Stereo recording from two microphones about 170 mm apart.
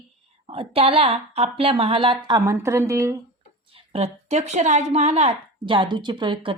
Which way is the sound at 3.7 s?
35° right (ahead or behind).